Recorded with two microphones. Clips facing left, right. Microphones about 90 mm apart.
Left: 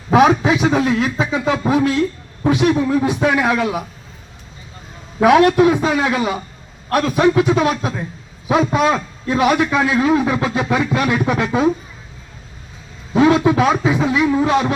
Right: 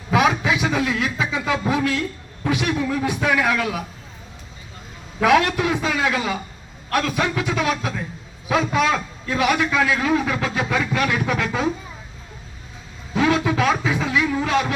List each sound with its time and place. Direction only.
0.1 s a man's voice: 35° left (ahead or behind)
5.2 s a man's voice: 25° left (ahead or behind)
13.1 s a man's voice: 25° left (ahead or behind)